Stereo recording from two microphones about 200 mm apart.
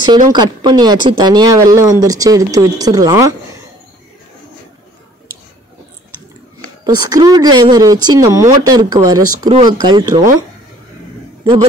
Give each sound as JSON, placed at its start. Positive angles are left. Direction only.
{"t": 0.3, "sound": "speech", "side_deg": -20}
{"t": 6.8, "sound": "speech", "side_deg": -20}